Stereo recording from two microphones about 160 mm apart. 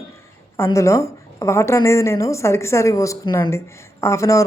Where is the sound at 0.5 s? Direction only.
15° left (ahead or behind).